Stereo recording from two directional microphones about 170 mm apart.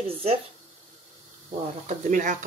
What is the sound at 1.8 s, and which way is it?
Speech, 50° right (ahead or behind).